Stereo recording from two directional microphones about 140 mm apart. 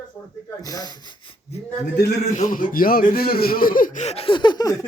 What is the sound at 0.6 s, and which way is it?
Speech, 25° left (ahead or behind).